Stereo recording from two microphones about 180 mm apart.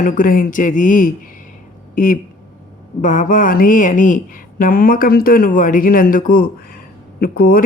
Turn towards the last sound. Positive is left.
turn(degrees=55)  # may be behind; listen again after turning